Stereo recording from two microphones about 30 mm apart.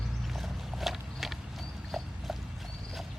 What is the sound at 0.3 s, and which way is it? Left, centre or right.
Boat, centre.